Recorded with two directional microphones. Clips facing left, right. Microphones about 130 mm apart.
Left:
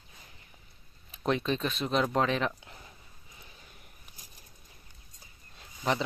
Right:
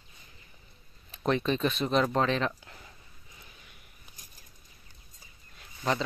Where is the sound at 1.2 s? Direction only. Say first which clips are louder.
Right 2 dB; centre (ahead or behind).